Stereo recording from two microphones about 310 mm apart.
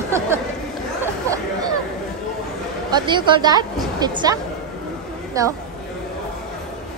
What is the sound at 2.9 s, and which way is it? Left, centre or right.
Speech, centre.